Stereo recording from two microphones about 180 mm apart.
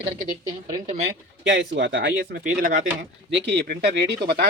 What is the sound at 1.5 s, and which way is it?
Speech, 80° right.